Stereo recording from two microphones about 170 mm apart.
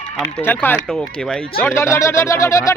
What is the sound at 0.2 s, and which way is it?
Speech, 10° left (ahead or behind).